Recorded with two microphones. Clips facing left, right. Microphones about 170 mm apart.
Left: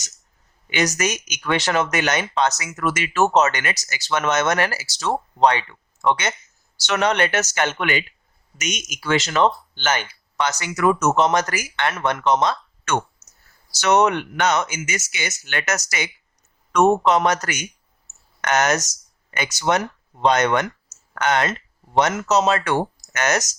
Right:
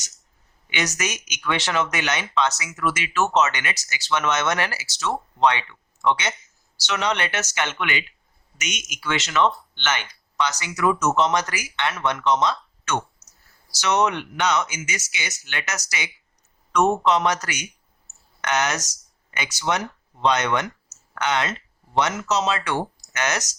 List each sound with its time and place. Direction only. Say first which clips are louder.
0.7 s speech: left 5 dB; 40° left (ahead or behind)
10.3 s speech: left 2 dB; 50° left (ahead or behind)